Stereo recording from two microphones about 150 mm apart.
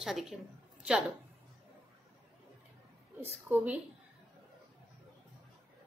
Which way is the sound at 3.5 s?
10° right (ahead or behind).